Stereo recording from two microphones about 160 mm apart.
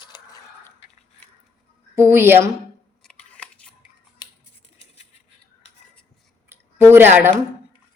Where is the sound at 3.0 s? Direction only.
10° left (ahead or behind).